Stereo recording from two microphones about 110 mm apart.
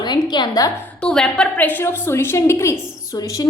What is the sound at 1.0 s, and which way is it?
A woman's voice, 5° left (ahead or behind).